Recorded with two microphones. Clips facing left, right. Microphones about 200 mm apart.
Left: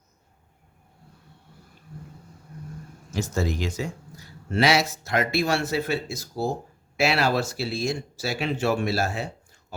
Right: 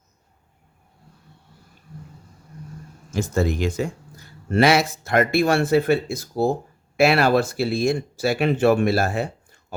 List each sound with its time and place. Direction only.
3.1 s speech: 55° right (ahead or behind)